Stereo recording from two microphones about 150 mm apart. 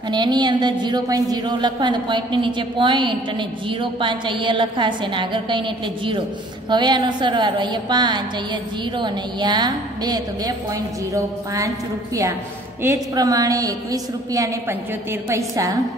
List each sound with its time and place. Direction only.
0.1 s a woman's voice: 30° right (ahead or behind)
6.7 s a woman's voice: 30° right (ahead or behind)
12.8 s a woman's voice: 20° right (ahead or behind)